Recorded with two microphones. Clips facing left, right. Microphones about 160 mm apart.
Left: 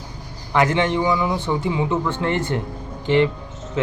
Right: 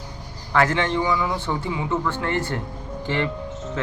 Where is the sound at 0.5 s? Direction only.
15° left (ahead or behind).